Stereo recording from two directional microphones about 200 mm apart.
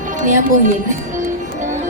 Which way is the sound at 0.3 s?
40° right (ahead or behind).